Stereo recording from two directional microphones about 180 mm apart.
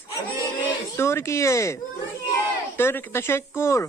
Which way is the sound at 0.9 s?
15° left (ahead or behind).